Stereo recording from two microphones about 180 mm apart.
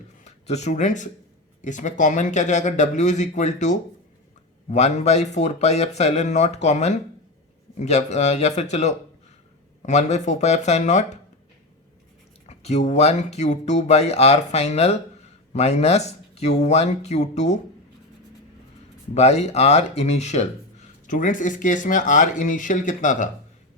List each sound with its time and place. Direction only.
0.3 s speech: 40° left (ahead or behind)
12.5 s speech: 40° left (ahead or behind)
19.1 s speech: 35° left (ahead or behind)